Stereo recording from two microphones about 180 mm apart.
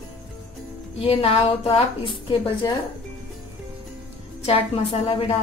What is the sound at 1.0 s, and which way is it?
A woman's voice, 30° left (ahead or behind).